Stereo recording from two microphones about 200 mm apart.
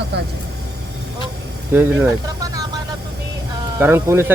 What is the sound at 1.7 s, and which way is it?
Speech, 10° right (ahead or behind).